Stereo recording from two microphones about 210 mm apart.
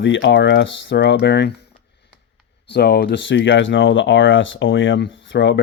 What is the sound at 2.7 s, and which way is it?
Speech, 50° left (ahead or behind).